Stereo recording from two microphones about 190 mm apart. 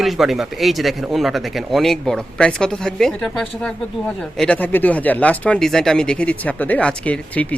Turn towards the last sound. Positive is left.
turn(degrees=10)  # may be behind; listen again after turning